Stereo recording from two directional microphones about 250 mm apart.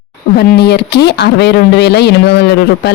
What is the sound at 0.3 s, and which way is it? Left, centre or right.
Speech, left.